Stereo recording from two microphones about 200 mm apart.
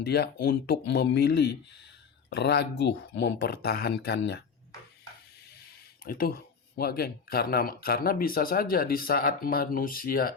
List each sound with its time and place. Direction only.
0.0 s speech: 55° left (ahead or behind)
6.1 s speech: 45° left (ahead or behind)